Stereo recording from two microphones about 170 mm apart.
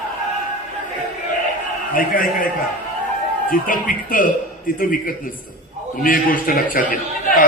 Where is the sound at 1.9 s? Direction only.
55° left (ahead or behind).